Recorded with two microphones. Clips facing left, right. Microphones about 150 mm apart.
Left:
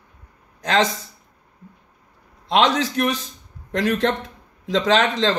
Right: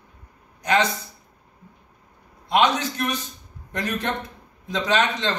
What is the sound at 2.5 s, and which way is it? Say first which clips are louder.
A man's voice: left 2 dB; 90° left.